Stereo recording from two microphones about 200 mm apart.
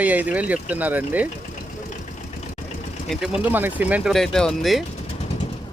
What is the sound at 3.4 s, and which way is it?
Speech, 10° right (ahead or behind).